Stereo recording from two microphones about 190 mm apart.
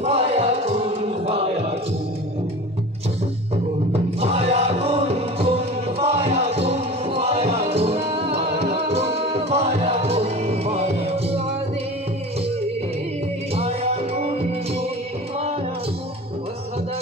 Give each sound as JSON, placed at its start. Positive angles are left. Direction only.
{"t": 0.0, "sound": "music", "side_deg": -30}
{"t": 3.9, "sound": "music", "side_deg": -30}
{"t": 13.6, "sound": "music", "side_deg": -30}